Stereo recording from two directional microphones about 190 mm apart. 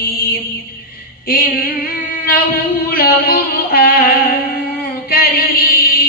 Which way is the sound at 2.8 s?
50° left (ahead or behind).